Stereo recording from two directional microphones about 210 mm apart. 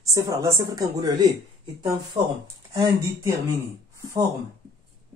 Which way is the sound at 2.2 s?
30° right (ahead or behind).